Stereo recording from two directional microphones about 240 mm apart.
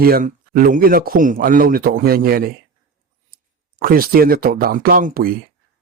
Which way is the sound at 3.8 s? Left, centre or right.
Right.